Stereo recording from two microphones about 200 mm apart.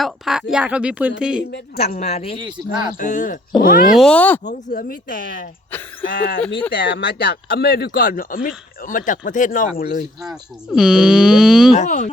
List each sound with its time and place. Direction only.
0.0 s speech: centre (ahead or behind)
1.5 s speech: 50° left (ahead or behind)
2.0 s speech: 30° left (ahead or behind)
2.4 s speech: 25° right (ahead or behind)
3.0 s speech: 40° left (ahead or behind)
3.9 s speech: 5° left (ahead or behind)
4.4 s speech: 45° left (ahead or behind)
10.2 s speech: centre (ahead or behind)
11.8 s speech: 35° left (ahead or behind)